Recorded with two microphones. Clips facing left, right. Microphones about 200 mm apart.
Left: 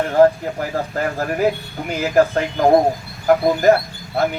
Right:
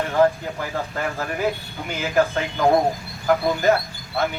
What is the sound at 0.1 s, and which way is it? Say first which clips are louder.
A man's voice: left 5 dB; 45° left (ahead or behind).